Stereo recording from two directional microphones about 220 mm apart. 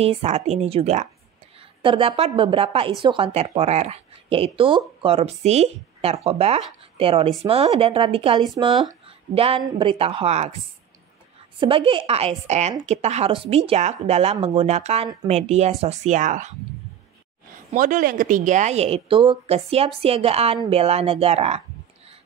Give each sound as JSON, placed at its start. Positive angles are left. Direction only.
{"t": 0.0, "sound": "speech", "side_deg": -30}
{"t": 11.6, "sound": "speech", "side_deg": -25}
{"t": 17.6, "sound": "speech", "side_deg": -35}